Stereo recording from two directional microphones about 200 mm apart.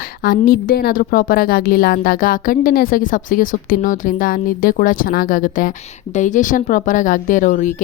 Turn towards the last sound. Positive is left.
turn(degrees=40)  # may be behind; listen again after turning